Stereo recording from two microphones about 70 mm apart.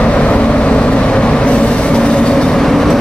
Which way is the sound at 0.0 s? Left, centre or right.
Centre.